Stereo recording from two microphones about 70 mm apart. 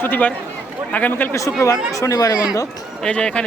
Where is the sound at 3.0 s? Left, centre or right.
Centre.